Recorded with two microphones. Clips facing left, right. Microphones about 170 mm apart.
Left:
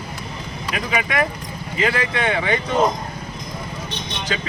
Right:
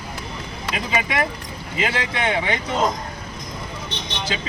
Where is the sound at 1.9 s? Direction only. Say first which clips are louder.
Left 2 dB; 20° right (ahead or behind).